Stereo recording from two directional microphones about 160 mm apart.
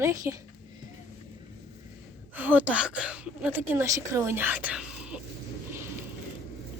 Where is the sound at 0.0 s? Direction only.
20° right (ahead or behind).